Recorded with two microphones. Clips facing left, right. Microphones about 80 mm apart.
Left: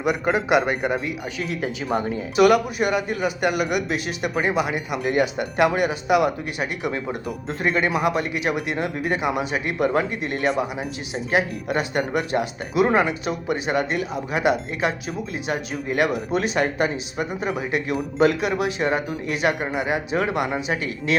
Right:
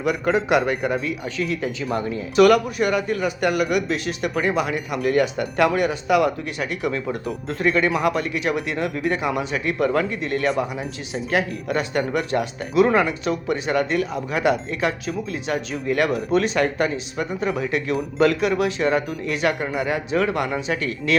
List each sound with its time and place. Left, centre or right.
0.0 s speech: centre
2.3 s speech: centre
9.9 s speech: left
10.2 s speech: centre